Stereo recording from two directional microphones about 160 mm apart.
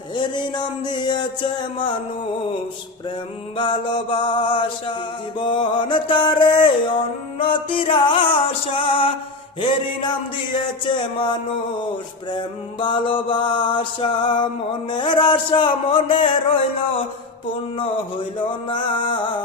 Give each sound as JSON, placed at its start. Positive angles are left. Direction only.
{"t": 0.2, "sound": "a sound", "side_deg": 30}
{"t": 3.6, "sound": "music", "side_deg": 30}
{"t": 5.4, "sound": "mantra", "side_deg": 30}
{"t": 10.8, "sound": "music", "side_deg": 30}
{"t": 12.8, "sound": "mantra", "side_deg": 30}
{"t": 18.3, "sound": "music", "side_deg": 30}